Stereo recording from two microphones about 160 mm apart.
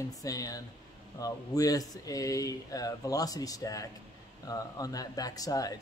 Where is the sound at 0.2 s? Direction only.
20° left (ahead or behind).